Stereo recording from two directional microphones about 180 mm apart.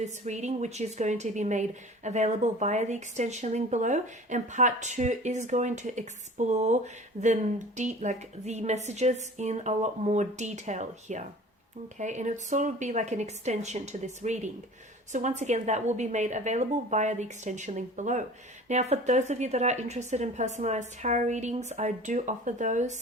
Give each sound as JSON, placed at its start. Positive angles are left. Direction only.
{"t": 0.0, "sound": "speech", "side_deg": -40}